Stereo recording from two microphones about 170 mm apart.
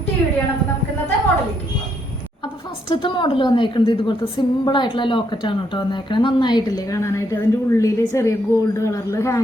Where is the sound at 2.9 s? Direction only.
30° left (ahead or behind).